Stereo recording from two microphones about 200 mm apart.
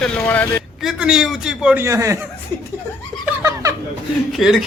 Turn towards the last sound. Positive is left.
turn(degrees=0)  # may be behind; listen again after turning